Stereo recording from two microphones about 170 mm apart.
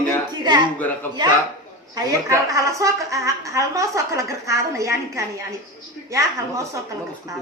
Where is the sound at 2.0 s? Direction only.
20° right (ahead or behind).